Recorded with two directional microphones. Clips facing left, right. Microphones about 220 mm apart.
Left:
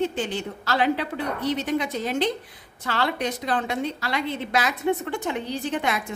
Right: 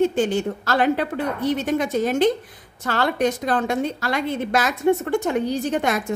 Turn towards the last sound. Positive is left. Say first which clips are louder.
# right 4 dB
turn(degrees=-45)  # may be behind; listen again after turning